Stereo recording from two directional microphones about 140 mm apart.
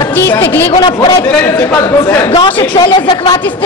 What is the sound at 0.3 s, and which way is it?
Speech, 15° left (ahead or behind).